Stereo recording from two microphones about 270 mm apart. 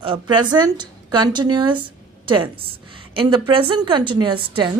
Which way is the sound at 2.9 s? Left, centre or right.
Centre.